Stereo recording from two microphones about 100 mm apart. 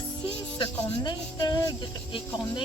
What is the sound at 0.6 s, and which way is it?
Speech, 45° left (ahead or behind).